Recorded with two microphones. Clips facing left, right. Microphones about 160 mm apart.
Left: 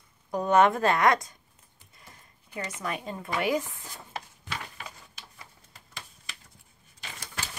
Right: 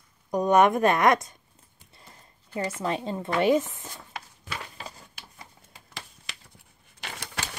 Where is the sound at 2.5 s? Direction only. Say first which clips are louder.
Right 6 dB; 30° right (ahead or behind).